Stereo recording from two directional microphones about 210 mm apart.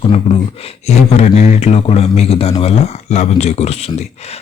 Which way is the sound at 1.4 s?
30° left (ahead or behind).